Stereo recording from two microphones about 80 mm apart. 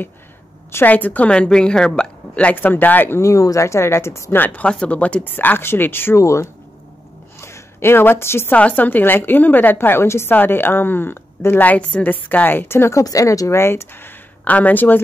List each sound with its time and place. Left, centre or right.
0.7 s a woman's voice: left
3.2 s speech: left
4.4 s a woman's voice: centre
6.2 s speech: left
7.3 s a sound: left
8.5 s a woman's voice: centre
13.0 s speech: left